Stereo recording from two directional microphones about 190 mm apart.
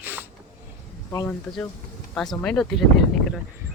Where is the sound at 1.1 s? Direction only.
15° left (ahead or behind).